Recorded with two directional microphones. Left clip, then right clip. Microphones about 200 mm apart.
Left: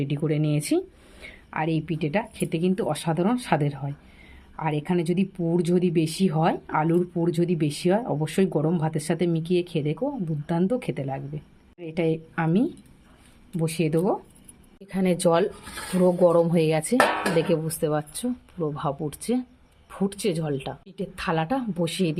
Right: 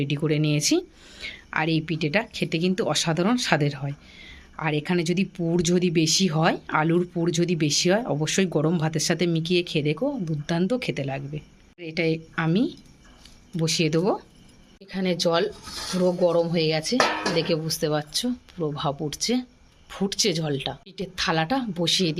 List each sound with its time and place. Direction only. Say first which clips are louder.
0.0 s a woman's voice: right 2 dB; centre (ahead or behind)
14.8 s a woman's voice: left 2 dB; 15° left (ahead or behind)